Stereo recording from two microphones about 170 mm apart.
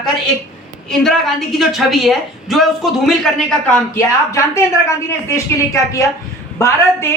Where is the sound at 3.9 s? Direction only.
15° left (ahead or behind).